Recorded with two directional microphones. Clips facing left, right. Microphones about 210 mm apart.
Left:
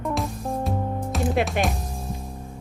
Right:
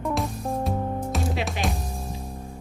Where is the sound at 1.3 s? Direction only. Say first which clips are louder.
Left 6 dB; 55° left (ahead or behind).